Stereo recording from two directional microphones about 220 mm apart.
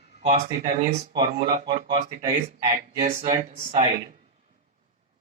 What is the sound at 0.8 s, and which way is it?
Speech, 25° right (ahead or behind).